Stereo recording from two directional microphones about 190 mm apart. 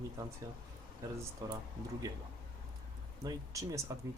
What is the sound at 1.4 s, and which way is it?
Speech, 20° right (ahead or behind).